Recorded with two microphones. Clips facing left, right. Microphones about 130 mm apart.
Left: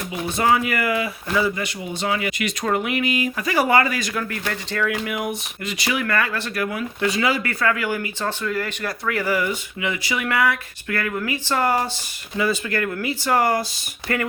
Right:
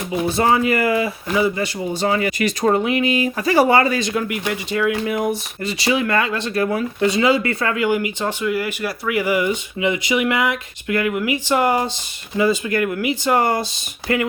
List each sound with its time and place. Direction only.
0.1 s speech: 35° right (ahead or behind)
1.5 s speech: 35° right (ahead or behind); by 4.9 s 15° right (ahead or behind)
5.0 s speech: 30° right (ahead or behind)